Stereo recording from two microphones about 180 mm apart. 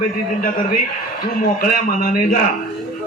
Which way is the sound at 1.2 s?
55° left (ahead or behind).